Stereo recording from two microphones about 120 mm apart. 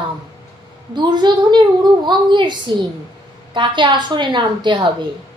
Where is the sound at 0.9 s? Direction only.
40° right (ahead or behind).